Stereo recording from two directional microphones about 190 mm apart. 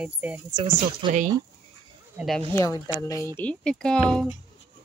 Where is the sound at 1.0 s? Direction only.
25° right (ahead or behind).